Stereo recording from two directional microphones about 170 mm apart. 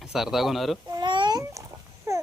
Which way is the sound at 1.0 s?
25° right (ahead or behind).